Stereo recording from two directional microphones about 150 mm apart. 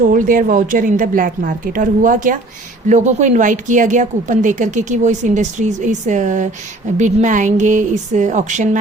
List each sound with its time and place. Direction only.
0.0 s speech: 65° right (ahead or behind)